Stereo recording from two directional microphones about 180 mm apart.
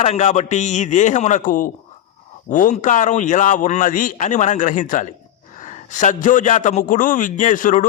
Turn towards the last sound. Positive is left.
turn(degrees=45)  # may be behind; listen again after turning